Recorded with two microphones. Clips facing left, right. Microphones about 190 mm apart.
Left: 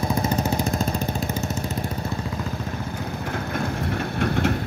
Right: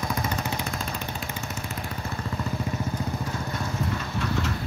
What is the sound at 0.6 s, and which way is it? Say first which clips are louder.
Vehicle: left 8 dB; 45° left (ahead or behind).